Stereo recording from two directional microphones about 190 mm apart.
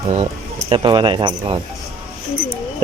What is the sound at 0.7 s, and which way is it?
Speech, 25° right (ahead or behind).